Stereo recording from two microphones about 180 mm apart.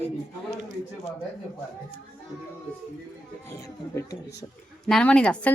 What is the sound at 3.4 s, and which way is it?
Speech, 15° left (ahead or behind).